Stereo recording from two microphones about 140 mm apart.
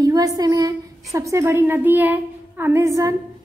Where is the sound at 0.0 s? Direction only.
25° right (ahead or behind).